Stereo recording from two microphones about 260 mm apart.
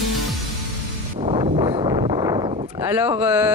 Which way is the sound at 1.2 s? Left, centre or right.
Right.